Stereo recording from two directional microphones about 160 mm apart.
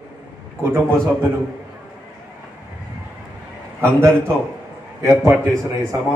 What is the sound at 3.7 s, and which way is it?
A man's voice, 15° right (ahead or behind).